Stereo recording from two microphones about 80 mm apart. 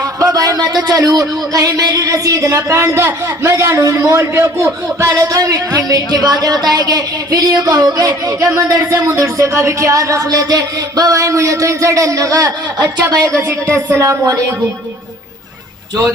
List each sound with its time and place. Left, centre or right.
0.0 s speech: right